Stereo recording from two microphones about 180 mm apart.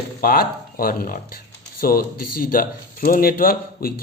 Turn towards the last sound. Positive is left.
turn(degrees=55)  # may be behind; listen again after turning